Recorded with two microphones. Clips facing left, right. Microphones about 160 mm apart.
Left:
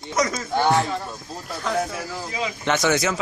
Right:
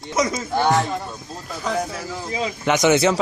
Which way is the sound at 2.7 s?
20° right (ahead or behind).